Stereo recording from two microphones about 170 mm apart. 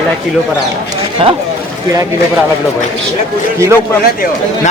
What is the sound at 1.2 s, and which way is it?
Speech, 35° right (ahead or behind).